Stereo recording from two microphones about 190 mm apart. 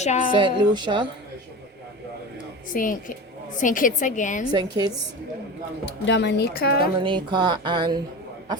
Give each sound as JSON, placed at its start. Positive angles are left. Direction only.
{"t": 0.0, "sound": "a woman's voice", "side_deg": 35}
{"t": 0.3, "sound": "speech", "side_deg": -25}
{"t": 2.7, "sound": "a woman's voice", "side_deg": 45}
{"t": 4.8, "sound": "speech", "side_deg": -20}
{"t": 6.1, "sound": "speech", "side_deg": 65}
{"t": 6.8, "sound": "speech", "side_deg": -25}